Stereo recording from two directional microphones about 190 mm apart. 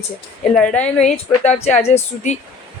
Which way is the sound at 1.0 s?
35° left (ahead or behind).